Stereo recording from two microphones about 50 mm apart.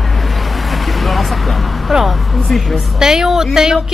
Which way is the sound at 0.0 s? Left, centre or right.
Centre.